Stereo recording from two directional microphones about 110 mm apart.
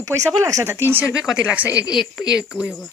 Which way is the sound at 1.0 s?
5° right (ahead or behind).